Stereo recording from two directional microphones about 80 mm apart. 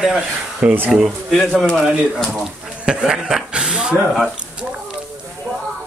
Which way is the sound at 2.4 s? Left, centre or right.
Centre.